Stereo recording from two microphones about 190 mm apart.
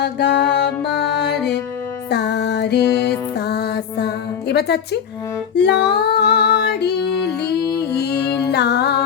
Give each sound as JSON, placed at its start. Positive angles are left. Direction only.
{"t": 0.0, "sound": "music", "side_deg": 65}